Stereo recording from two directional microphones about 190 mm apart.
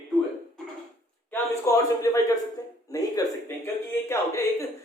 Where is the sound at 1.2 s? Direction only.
15° left (ahead or behind).